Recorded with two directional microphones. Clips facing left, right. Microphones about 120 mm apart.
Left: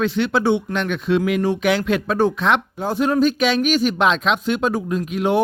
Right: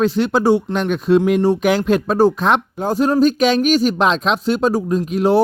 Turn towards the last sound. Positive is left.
turn(degrees=-35)  # may be behind; listen again after turning